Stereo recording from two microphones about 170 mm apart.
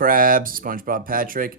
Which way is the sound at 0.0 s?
55° right (ahead or behind).